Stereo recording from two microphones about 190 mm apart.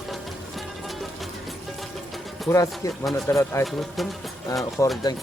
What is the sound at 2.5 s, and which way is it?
Speech, 15° left (ahead or behind).